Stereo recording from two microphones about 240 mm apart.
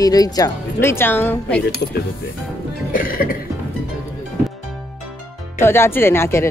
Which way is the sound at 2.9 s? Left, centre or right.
Left.